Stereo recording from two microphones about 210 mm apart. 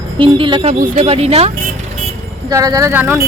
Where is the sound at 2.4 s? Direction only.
15° right (ahead or behind).